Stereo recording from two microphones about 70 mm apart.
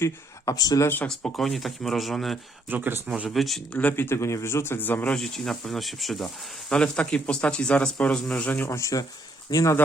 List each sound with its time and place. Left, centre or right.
0.5 s speech: left
1.0 s speech: centre
2.6 s speech: right
3.2 s speech: centre
3.7 s speech: left
4.0 s speech: left
5.1 s speech: centre
8.5 s speech: left
9.5 s speech: left